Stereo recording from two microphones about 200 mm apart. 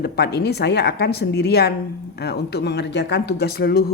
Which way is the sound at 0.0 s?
55° left (ahead or behind).